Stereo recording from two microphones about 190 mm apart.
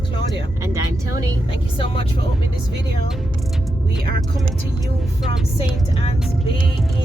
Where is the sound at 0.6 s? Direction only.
15° right (ahead or behind).